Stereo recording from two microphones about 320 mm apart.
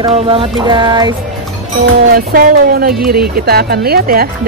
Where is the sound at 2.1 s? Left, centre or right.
Right.